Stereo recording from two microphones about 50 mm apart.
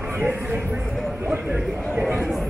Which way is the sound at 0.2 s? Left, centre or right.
Right.